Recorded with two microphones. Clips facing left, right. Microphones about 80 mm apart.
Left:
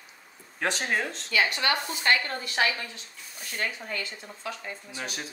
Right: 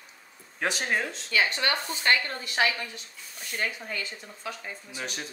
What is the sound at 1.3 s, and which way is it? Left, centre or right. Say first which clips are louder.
Speech: even; right.